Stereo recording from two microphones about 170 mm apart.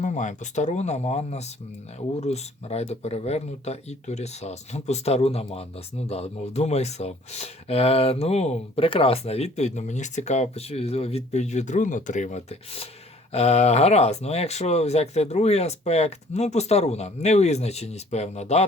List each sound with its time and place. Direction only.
0.0 s speech: 45° left (ahead or behind)